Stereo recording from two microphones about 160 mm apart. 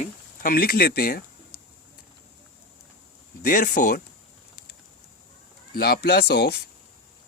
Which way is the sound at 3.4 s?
60° left (ahead or behind).